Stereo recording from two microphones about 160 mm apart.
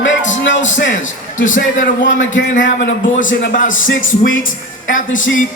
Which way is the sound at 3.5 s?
55° left (ahead or behind).